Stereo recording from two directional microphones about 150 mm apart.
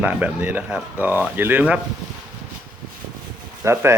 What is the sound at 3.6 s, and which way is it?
Speech, 20° right (ahead or behind).